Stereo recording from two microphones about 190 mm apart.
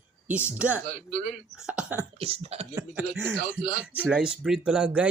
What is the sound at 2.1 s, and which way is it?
Speech, 30° right (ahead or behind).